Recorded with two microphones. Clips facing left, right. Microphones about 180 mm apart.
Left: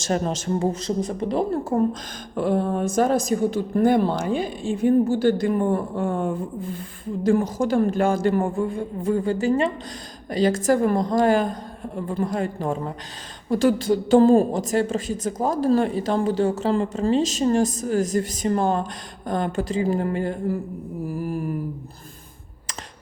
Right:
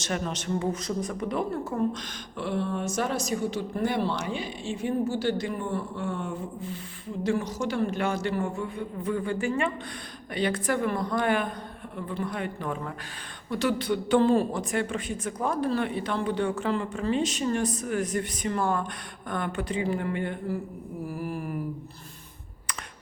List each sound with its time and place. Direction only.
0.1 s a woman's voice: 35° left (ahead or behind)
2.3 s a woman's voice: 45° left (ahead or behind)
12.6 s speech: 25° left (ahead or behind)
13.5 s a woman's voice: 45° left (ahead or behind)
18.6 s speech: 25° left (ahead or behind)
19.3 s a woman's voice: 40° left (ahead or behind)